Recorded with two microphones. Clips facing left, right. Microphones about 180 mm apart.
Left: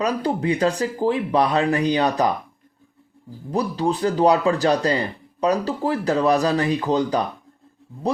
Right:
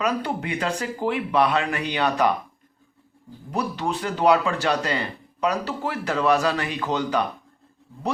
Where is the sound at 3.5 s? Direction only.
35° left (ahead or behind).